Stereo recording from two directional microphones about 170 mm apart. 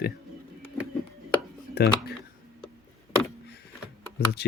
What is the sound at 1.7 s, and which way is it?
Speech, 70° left (ahead or behind).